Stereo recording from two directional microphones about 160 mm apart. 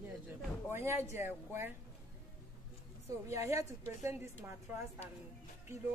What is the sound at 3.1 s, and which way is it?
A woman's voice, 20° right (ahead or behind).